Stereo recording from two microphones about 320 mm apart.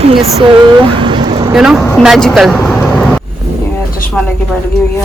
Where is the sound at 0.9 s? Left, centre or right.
Centre.